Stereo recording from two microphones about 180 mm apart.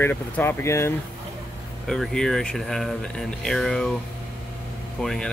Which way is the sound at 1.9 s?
Centre (ahead or behind).